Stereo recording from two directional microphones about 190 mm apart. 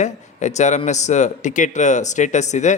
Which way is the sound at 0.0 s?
40° left (ahead or behind).